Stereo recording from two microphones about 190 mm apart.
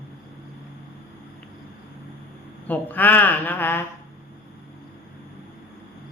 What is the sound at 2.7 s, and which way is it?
Speech, 10° left (ahead or behind).